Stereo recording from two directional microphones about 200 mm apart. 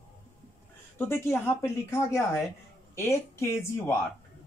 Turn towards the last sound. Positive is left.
turn(degrees=15)  # may be behind; listen again after turning